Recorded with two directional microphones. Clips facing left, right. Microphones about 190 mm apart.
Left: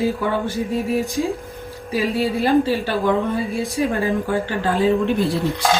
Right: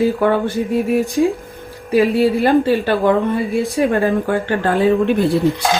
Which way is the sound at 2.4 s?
60° right (ahead or behind).